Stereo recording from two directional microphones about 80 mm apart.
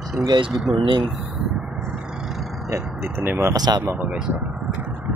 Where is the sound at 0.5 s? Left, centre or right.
Centre.